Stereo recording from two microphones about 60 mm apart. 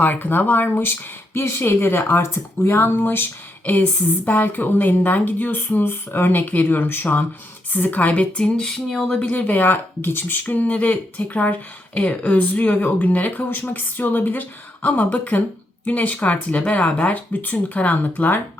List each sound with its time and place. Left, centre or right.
0.0 s speech: left
4.3 s speech: left; by 9.1 s centre
9.1 s speech: left